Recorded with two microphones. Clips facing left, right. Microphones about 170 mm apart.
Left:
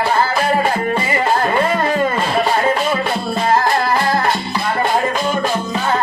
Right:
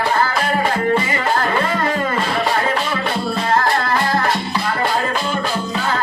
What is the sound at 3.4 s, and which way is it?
Music, 25° left (ahead or behind).